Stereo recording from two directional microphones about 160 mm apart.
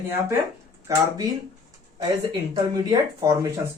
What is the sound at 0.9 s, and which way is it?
Speech, 20° right (ahead or behind).